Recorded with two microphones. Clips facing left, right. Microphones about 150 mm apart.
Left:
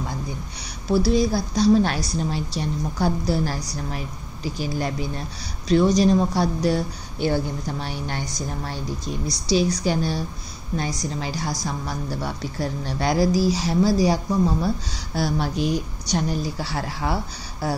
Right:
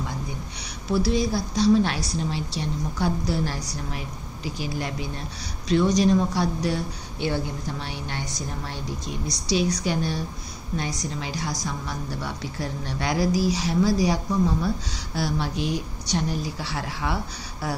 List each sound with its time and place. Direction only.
0.9 s speech: 40° left (ahead or behind)
5.9 s speech: 40° left (ahead or behind)
9.5 s speech: 35° left (ahead or behind)
11.1 s speech: 40° left (ahead or behind)